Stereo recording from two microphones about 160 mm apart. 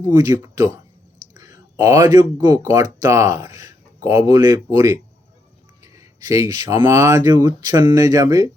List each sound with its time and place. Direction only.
0.0 s speech: 25° right (ahead or behind)
5.8 s a sound: 20° right (ahead or behind)
6.7 s speech: 15° right (ahead or behind)